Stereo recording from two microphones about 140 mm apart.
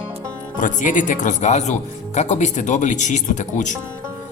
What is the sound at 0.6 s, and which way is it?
Speech, 65° left (ahead or behind).